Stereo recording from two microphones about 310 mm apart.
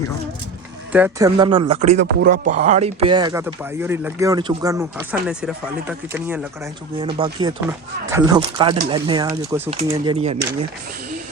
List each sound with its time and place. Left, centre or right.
0.9 s speech: centre